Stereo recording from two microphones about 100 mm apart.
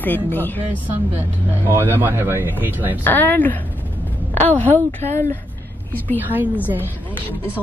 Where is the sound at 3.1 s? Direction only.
20° left (ahead or behind).